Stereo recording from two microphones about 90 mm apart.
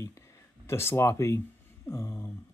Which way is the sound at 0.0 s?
35° left (ahead or behind).